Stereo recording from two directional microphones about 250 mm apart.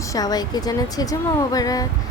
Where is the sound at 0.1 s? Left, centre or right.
Centre.